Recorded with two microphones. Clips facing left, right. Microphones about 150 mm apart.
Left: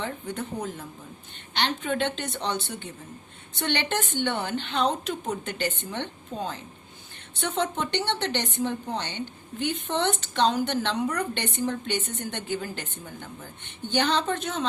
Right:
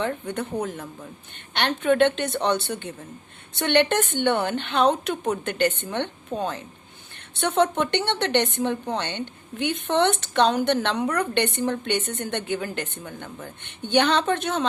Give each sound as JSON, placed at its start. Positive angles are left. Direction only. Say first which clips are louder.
{"t": 0.0, "sound": "a woman's voice", "louder": "right 5 dB", "side_deg": -65}